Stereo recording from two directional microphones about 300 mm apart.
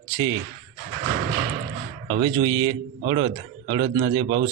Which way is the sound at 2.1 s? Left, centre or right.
Centre.